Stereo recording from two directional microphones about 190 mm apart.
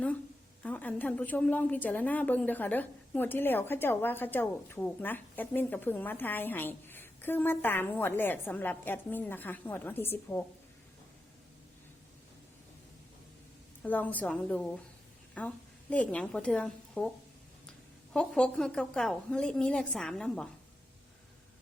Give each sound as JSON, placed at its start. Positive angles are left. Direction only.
{"t": 0.6, "sound": "a woman's voice", "side_deg": 10}
{"t": 13.8, "sound": "a woman's voice", "side_deg": 10}
{"t": 18.1, "sound": "a woman's voice", "side_deg": 5}